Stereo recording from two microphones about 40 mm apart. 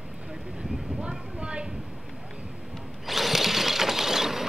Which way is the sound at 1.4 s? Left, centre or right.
Right.